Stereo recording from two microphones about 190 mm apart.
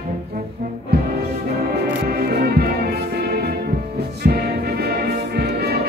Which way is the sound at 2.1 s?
55° right (ahead or behind).